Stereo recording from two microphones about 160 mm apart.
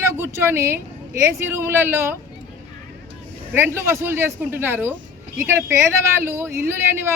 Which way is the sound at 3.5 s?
15° right (ahead or behind).